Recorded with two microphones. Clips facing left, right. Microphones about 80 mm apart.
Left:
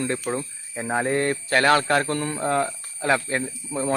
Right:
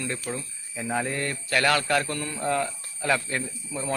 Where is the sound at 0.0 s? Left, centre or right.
Left.